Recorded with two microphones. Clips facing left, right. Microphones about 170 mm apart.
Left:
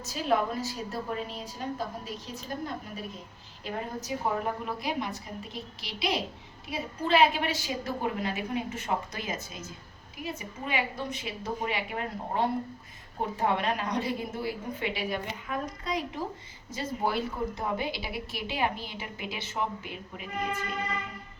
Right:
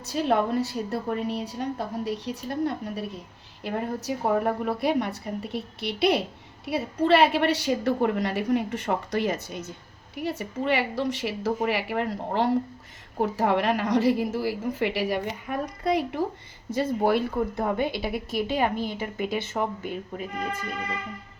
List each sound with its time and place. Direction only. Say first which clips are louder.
0.0 s a woman's voice: right 4 dB; 60° right (ahead or behind); by 15.0 s 80° right
15.4 s a woman's voice: right 8 dB; 60° right (ahead or behind); by 20.2 s 45° right (ahead or behind)